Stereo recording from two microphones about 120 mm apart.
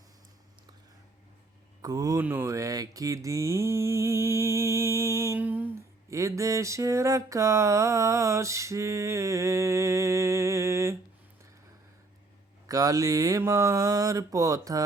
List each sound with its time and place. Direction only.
1.8 s mantra: 30° right (ahead or behind)
2.2 s speech: 20° right (ahead or behind)
12.6 s mantra: 30° right (ahead or behind)